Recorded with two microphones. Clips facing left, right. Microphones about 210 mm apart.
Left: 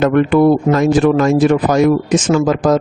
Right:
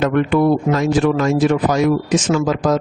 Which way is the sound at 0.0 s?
50° left (ahead or behind).